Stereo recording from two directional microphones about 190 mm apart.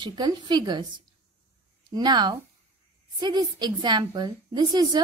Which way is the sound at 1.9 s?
20° right (ahead or behind).